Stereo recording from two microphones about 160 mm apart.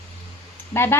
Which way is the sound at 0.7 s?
15° left (ahead or behind).